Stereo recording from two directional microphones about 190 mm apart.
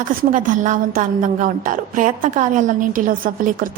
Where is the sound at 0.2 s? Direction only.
45° right (ahead or behind).